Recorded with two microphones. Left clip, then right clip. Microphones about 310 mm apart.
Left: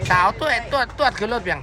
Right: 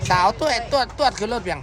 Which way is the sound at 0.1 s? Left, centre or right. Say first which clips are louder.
Left 1 dB; centre.